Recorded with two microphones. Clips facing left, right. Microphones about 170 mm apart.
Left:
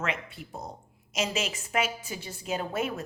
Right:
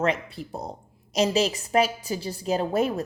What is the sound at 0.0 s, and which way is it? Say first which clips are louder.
A woman's voice: right 8 dB; 35° right (ahead or behind).